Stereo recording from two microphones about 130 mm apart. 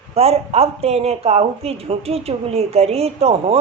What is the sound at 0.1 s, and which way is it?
Speech, 50° right (ahead or behind).